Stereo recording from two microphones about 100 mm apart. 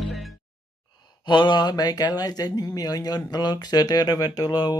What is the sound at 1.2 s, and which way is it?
Speech, 50° left (ahead or behind).